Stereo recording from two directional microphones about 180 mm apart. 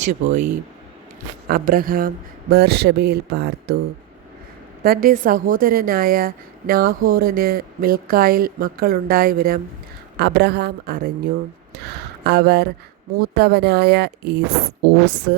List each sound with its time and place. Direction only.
0.0 s a woman's voice: 40° right (ahead or behind)
1.5 s speech: 55° right (ahead or behind)
4.8 s a woman's voice: 55° right (ahead or behind)
10.2 s speech: 65° right (ahead or behind)
12.2 s speech: 60° right (ahead or behind)